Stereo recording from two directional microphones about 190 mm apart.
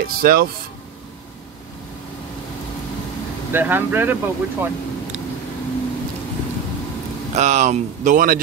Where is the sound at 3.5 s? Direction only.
10° right (ahead or behind).